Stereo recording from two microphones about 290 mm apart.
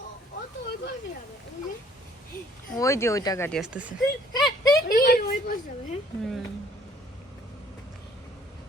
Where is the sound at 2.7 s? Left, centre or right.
Centre.